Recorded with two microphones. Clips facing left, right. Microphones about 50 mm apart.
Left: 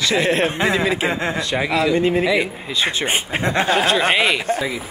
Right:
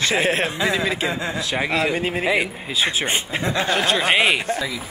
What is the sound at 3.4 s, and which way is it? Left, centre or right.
Speech, left.